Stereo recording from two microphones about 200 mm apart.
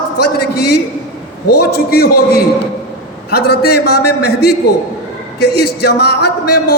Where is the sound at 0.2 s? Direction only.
55° left (ahead or behind).